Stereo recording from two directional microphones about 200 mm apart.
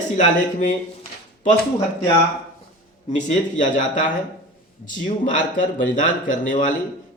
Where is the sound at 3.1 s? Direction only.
35° left (ahead or behind).